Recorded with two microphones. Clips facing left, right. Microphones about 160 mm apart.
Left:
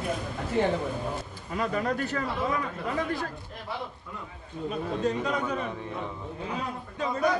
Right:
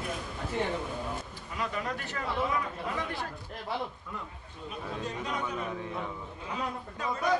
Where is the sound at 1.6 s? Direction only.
45° left (ahead or behind).